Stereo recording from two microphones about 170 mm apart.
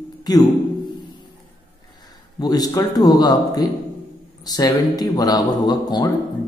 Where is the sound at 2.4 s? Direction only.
20° left (ahead or behind).